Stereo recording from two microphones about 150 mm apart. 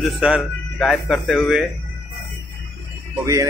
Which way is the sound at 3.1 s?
20° right (ahead or behind).